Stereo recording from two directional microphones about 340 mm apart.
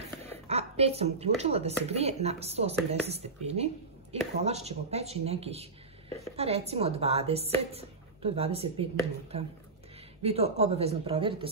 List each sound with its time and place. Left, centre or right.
0.5 s speech: centre